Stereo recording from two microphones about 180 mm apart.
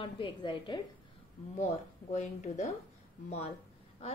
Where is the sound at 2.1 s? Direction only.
40° left (ahead or behind).